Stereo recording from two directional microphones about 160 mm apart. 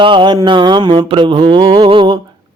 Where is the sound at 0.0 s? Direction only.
30° right (ahead or behind).